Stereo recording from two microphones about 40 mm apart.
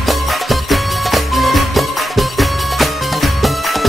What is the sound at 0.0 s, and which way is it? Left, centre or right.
Music, centre.